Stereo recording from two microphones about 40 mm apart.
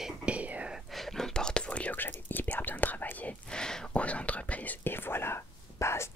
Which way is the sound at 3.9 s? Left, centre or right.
Left.